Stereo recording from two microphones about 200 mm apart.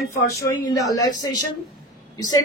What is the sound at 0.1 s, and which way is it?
Speech, 15° left (ahead or behind).